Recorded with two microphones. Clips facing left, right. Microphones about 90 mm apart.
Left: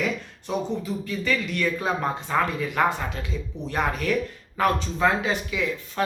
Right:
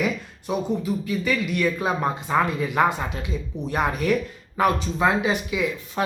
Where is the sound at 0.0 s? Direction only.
10° right (ahead or behind).